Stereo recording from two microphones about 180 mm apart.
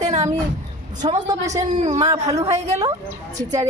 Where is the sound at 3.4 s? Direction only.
40° right (ahead or behind).